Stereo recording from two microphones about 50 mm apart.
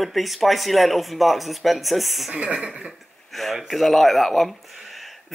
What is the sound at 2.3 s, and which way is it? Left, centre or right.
Speech, right.